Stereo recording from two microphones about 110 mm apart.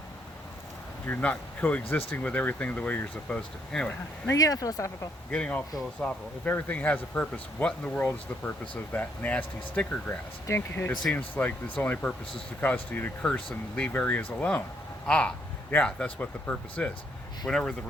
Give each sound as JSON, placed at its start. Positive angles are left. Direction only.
{"t": 1.0, "sound": "speech", "side_deg": 15}
{"t": 4.3, "sound": "speech", "side_deg": 30}
{"t": 5.3, "sound": "speech", "side_deg": 10}